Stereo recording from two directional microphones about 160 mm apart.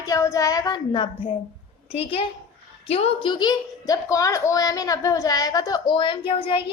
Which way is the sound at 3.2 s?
25° left (ahead or behind).